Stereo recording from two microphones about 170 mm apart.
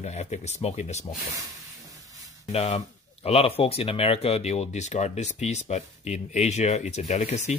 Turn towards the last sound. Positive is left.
turn(degrees=40)  # may be behind; listen again after turning